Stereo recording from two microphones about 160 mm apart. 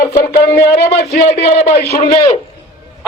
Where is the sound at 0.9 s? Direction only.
45° left (ahead or behind).